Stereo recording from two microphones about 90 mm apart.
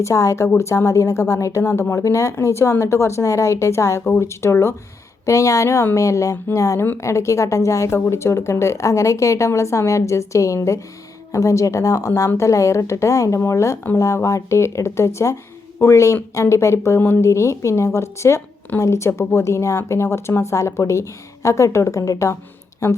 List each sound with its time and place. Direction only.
0.0 s a woman's voice: 35° left (ahead or behind)